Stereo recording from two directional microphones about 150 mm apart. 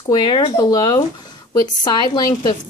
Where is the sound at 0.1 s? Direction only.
25° left (ahead or behind).